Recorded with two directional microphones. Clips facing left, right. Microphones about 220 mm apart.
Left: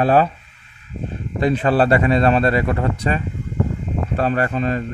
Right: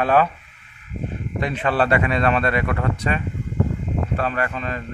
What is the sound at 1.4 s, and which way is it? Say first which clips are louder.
Speech: left 5 dB; 35° left (ahead or behind).